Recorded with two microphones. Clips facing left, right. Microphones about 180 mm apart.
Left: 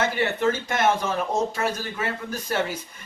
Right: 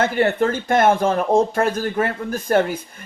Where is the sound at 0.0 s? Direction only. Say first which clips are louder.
Right 5 dB; 55° right (ahead or behind).